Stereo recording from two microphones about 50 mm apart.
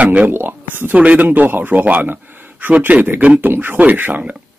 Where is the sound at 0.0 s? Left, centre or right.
Right.